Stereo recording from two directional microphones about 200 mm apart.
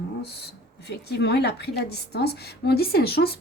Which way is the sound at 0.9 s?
55° left (ahead or behind).